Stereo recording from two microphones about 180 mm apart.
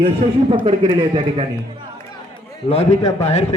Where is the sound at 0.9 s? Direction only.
35° right (ahead or behind).